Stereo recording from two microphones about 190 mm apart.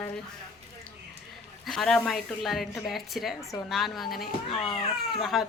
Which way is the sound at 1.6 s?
Centre (ahead or behind).